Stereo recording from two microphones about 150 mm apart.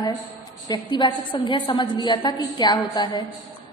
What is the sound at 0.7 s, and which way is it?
A woman's voice, 30° left (ahead or behind).